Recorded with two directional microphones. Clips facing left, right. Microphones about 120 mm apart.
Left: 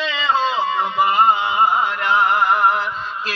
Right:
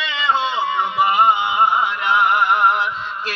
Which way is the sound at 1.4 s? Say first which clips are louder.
Even; centre (ahead or behind).